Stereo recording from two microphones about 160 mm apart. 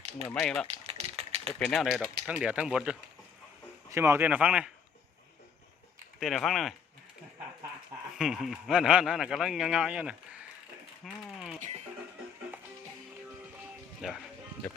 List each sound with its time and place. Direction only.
0.3 s speech: 5° left (ahead or behind)
0.7 s a sound: 40° right (ahead or behind)
1.5 s speech: centre (ahead or behind)
3.8 s speech: 15° right (ahead or behind)
6.1 s speech: centre (ahead or behind)
8.2 s speech: centre (ahead or behind)
11.0 s mechanisms: centre (ahead or behind)
14.0 s speech: 5° right (ahead or behind)